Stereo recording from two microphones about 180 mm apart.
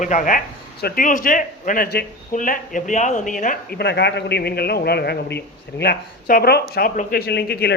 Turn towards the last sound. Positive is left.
turn(degrees=65)  # may be behind; listen again after turning